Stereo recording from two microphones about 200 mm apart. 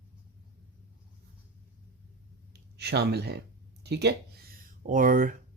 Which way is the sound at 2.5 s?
55° right (ahead or behind).